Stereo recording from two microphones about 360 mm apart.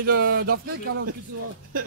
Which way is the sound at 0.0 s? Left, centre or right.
Right.